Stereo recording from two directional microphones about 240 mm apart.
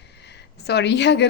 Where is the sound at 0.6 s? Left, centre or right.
Left.